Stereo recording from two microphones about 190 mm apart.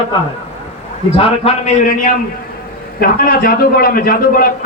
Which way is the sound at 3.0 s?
50° left (ahead or behind).